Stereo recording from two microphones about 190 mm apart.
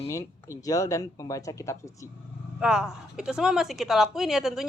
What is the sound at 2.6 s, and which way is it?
Speech, 5° right (ahead or behind).